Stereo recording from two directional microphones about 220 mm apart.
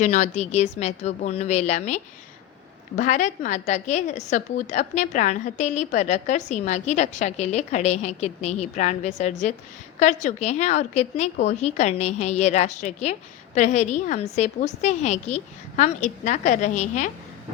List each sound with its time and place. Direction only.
0.0 s a woman's voice: 30° left (ahead or behind)